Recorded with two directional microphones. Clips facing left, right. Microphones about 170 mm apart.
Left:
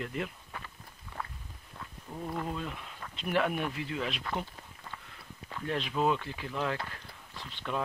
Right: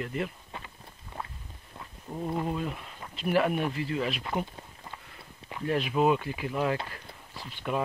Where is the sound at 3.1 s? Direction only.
5° right (ahead or behind).